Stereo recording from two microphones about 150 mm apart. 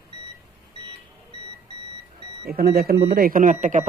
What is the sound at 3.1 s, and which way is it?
Speech, 75° right (ahead or behind).